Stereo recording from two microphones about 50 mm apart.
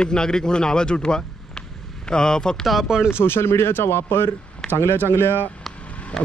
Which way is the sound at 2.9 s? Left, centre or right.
Centre.